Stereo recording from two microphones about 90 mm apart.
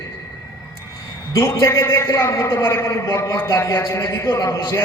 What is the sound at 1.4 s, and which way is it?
A man's voice, 30° left (ahead or behind).